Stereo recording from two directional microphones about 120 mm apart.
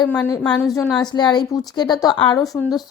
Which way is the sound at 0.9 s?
5° left (ahead or behind).